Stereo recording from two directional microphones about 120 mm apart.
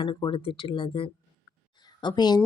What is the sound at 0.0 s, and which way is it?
Speech, 40° left (ahead or behind).